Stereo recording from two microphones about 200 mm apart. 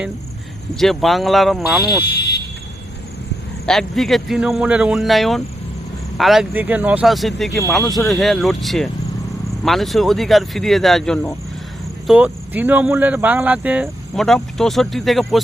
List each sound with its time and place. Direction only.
0.8 s speech: centre (ahead or behind)
2.0 s a sound: 55° left (ahead or behind)
3.7 s speech: centre (ahead or behind)